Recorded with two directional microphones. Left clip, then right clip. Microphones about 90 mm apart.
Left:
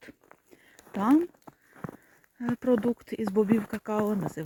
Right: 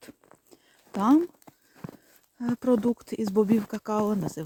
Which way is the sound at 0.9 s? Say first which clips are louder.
Right 2 dB; 20° right (ahead or behind).